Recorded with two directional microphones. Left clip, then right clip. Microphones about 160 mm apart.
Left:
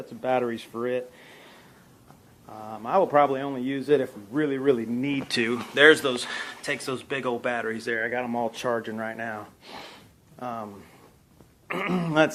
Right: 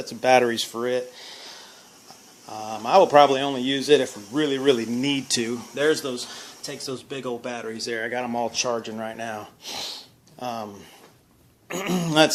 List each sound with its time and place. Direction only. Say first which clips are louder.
0.2 s speech: right 8 dB; 60° right (ahead or behind)
0.5 s speech: right 4 dB; 30° right (ahead or behind)
2.5 s speech: right 6 dB; 35° right (ahead or behind)
3.8 s speech: right 4 dB; 25° right (ahead or behind)
5.7 s speech: left 6 dB; centre (ahead or behind)
7.9 s speech: right 2 dB; 35° right (ahead or behind)
8.6 s speech: right 1 dB; 5° right (ahead or behind)
8.9 s speech: right 1 dB; 20° right (ahead or behind)
9.6 s speech: right 9 dB; 55° right (ahead or behind)
10.4 s speech: right 3 dB; 35° right (ahead or behind)
11.7 s speech: right 2 dB; 45° right (ahead or behind)